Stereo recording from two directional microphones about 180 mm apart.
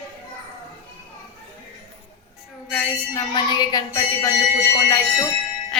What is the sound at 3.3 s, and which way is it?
Speech, 25° left (ahead or behind).